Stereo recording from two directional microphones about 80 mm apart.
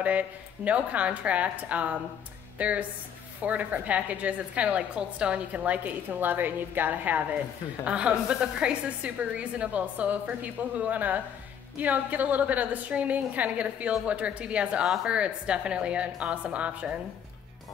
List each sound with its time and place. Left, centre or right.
0.7 s a woman's voice: centre